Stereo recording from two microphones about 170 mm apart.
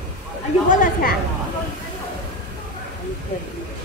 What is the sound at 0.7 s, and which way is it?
Speech, 50° left (ahead or behind).